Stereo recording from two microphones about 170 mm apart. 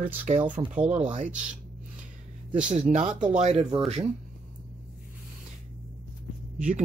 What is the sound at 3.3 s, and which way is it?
Speech, 35° right (ahead or behind).